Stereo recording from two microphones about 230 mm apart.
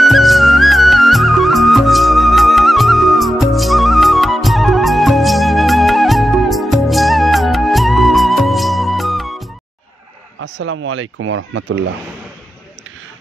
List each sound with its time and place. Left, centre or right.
0.0 s music: centre
10.4 s speech: right